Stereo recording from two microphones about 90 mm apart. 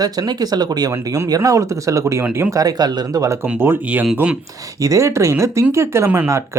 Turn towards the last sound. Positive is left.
turn(degrees=-25)  # may be behind; listen again after turning